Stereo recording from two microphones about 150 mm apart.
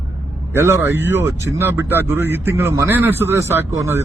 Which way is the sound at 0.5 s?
15° right (ahead or behind).